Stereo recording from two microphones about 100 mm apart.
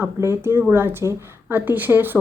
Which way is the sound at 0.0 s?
25° right (ahead or behind).